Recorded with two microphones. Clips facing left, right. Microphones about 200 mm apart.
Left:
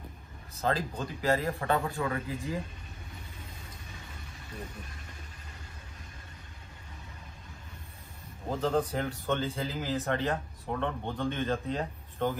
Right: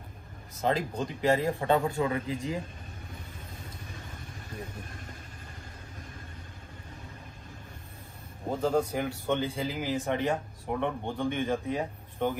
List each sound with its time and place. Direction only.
0.6 s a man's voice: 15° right (ahead or behind)
8.5 s a man's voice: 10° right (ahead or behind)